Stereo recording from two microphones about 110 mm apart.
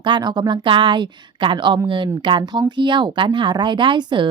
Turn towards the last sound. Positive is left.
turn(degrees=-45)  # may be behind; listen again after turning